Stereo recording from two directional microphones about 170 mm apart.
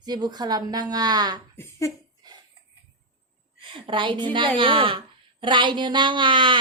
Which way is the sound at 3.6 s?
30° right (ahead or behind).